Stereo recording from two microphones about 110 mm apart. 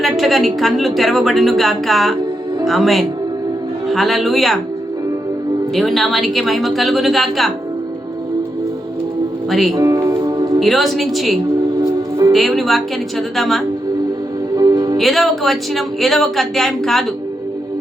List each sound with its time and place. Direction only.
0.0 s a woman's voice: centre (ahead or behind)
5.7 s a woman's voice: centre (ahead or behind)
9.5 s a woman's voice: centre (ahead or behind)
9.7 s music: 30° right (ahead or behind)
10.6 s a woman's voice: centre (ahead or behind)
11.8 s music: 35° right (ahead or behind)
12.3 s a woman's voice: centre (ahead or behind)
14.5 s music: 35° right (ahead or behind)
14.9 s a woman's voice: centre (ahead or behind)